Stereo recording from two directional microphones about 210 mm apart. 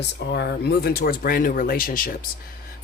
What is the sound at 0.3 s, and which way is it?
Speech, 50° left (ahead or behind).